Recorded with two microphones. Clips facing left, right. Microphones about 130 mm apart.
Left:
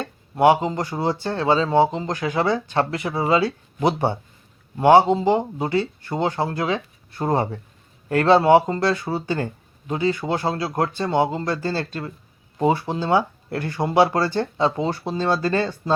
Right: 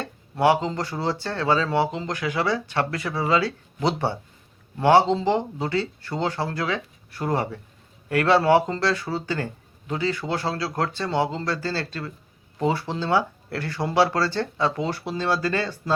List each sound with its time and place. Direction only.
0.0 s speech: 20° left (ahead or behind)